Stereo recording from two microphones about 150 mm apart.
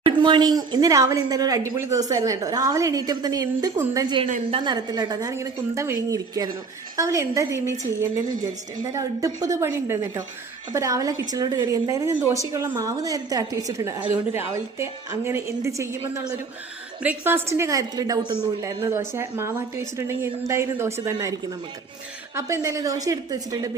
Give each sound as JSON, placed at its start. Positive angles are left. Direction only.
{"t": 0.0, "sound": "speech", "side_deg": -30}
{"t": 8.8, "sound": "speech", "side_deg": -20}
{"t": 17.0, "sound": "speech", "side_deg": -10}
{"t": 22.4, "sound": "speech", "side_deg": -20}